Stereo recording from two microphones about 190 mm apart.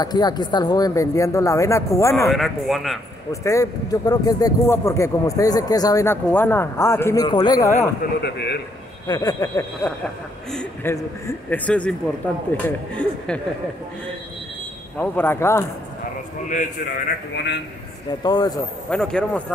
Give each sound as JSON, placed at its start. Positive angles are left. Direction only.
{"t": 0.0, "sound": "speech", "side_deg": 20}
{"t": 2.2, "sound": "a man's voice", "side_deg": 0}
{"t": 3.3, "sound": "speech", "side_deg": 15}
{"t": 8.0, "sound": "speech", "side_deg": 60}
{"t": 9.0, "sound": "speech", "side_deg": 20}
{"t": 15.0, "sound": "speech", "side_deg": 10}
{"t": 17.3, "sound": "speech", "side_deg": 65}
{"t": 18.2, "sound": "speech", "side_deg": 20}
{"t": 18.9, "sound": "a man's voice", "side_deg": 5}